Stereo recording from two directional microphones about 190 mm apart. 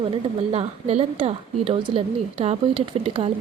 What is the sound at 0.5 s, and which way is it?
A woman's voice, 30° right (ahead or behind).